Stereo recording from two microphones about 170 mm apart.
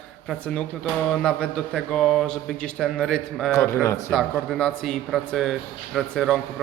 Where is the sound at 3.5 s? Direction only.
15° left (ahead or behind).